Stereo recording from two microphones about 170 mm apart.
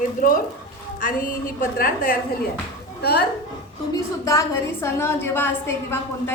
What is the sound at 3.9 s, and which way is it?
A woman's voice, 20° left (ahead or behind).